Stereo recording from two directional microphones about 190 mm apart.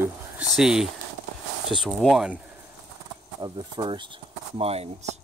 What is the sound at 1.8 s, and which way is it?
Speech, centre (ahead or behind).